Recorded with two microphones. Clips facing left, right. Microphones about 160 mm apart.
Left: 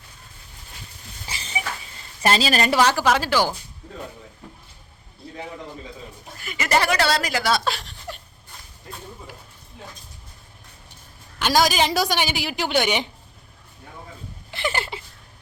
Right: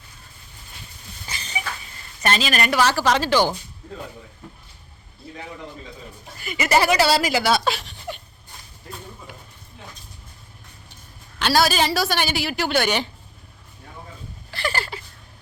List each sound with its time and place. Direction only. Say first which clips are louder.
1.3 s a sound: even; 30° left (ahead or behind)
2.2 s a woman's voice: left 2 dB; 30° left (ahead or behind)
2.8 s a woman's voice: even; 10° left (ahead or behind)
6.3 s speech: right 2 dB; centre (ahead or behind)
11.3 s a woman's voice: even; 15° left (ahead or behind)
14.5 s a sound: left 1 dB; 20° left (ahead or behind)